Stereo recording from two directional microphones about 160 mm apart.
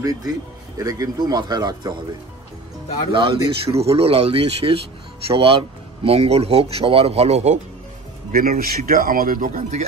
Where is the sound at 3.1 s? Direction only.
30° right (ahead or behind).